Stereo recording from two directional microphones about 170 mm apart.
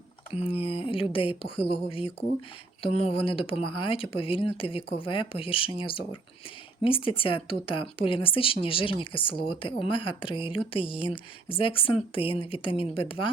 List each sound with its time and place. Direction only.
0.3 s speech: 35° left (ahead or behind)